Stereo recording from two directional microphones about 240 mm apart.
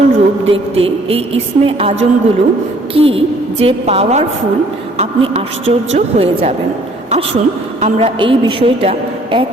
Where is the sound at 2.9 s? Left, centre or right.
Right.